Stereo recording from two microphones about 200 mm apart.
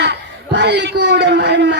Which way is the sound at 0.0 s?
60° right (ahead or behind).